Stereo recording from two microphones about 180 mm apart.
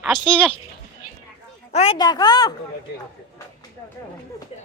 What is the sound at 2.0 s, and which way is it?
Speech, 20° left (ahead or behind).